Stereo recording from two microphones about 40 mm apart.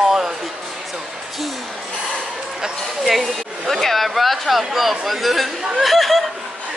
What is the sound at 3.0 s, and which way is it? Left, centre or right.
Speech, centre.